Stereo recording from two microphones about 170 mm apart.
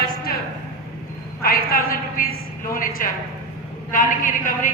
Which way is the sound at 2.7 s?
55° left (ahead or behind).